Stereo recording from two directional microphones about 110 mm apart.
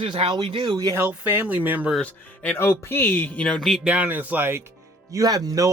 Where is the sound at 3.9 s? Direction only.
15° right (ahead or behind).